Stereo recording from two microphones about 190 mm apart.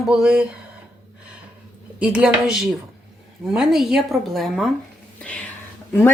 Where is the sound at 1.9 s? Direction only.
5° right (ahead or behind).